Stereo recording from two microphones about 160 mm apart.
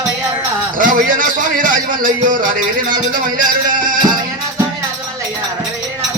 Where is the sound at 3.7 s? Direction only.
55° right (ahead or behind).